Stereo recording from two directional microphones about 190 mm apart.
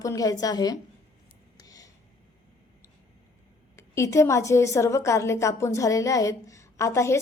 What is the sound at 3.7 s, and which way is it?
A woman's voice, 15° left (ahead or behind).